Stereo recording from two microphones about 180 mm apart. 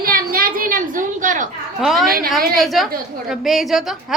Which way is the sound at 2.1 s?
55° right (ahead or behind).